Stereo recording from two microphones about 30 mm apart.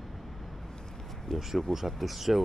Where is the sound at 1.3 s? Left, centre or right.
Left.